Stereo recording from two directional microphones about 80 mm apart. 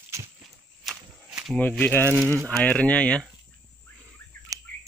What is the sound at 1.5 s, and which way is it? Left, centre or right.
Speech, centre.